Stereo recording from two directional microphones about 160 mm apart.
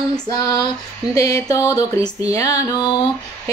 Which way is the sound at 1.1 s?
20° left (ahead or behind).